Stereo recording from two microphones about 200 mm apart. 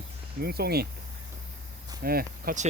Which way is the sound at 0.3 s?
50° right (ahead or behind).